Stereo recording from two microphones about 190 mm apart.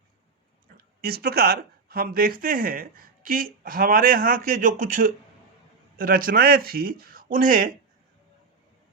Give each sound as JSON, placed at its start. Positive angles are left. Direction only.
{"t": 0.8, "sound": "speech", "side_deg": -55}